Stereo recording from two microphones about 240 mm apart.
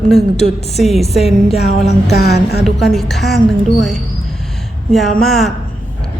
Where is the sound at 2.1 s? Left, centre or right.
Left.